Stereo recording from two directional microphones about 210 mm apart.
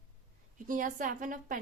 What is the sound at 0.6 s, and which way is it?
Speech, 40° right (ahead or behind).